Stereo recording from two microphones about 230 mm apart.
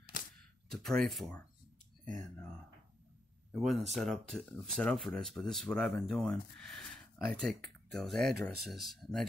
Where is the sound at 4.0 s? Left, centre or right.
Centre.